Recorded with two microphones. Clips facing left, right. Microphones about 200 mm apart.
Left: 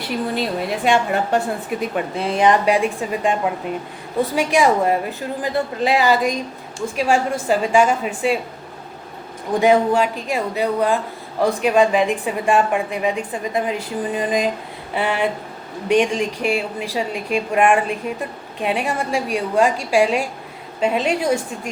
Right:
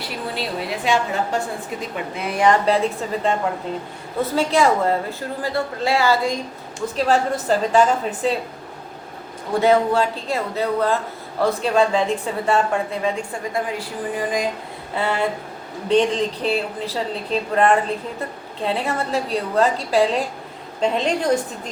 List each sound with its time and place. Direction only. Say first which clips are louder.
0.9 s a woman's voice: left 3 dB; 60° left (ahead or behind)
2.1 s speech: left 1 dB; 25° left (ahead or behind); by 8.4 s 10° left (ahead or behind)
9.5 s speech: left 1 dB; 15° left (ahead or behind)